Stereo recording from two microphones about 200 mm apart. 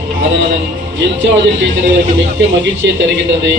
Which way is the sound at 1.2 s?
70° right (ahead or behind).